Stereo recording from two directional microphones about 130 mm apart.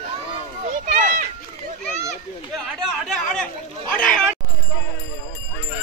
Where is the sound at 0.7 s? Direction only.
90° right.